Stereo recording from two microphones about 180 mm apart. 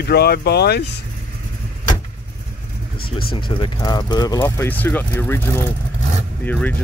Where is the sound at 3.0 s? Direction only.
55° left (ahead or behind).